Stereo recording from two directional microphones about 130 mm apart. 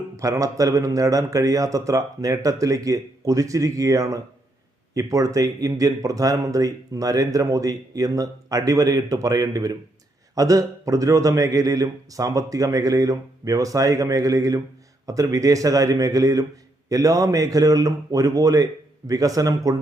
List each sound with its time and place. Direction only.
0.2 s speech: 25° right (ahead or behind)